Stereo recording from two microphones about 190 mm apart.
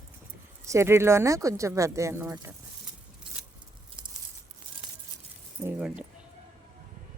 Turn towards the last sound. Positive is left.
turn(degrees=-5)  # may be behind; listen again after turning